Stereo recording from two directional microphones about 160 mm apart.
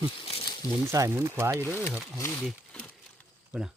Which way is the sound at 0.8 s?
20° right (ahead or behind).